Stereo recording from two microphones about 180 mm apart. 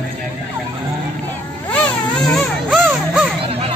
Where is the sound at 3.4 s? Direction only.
30° right (ahead or behind).